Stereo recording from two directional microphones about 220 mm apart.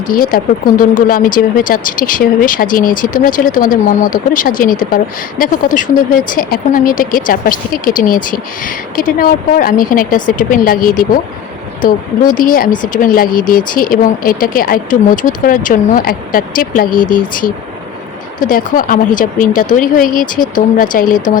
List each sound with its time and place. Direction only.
0.1 s speech: 40° left (ahead or behind)